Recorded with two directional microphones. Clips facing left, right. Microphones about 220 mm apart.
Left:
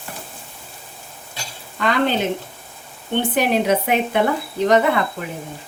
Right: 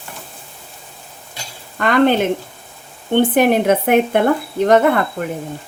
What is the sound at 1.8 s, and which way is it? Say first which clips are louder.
Speech: right 6 dB; 55° right (ahead or behind).